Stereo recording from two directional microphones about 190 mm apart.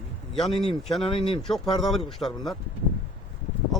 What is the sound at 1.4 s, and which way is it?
Speech, centre (ahead or behind).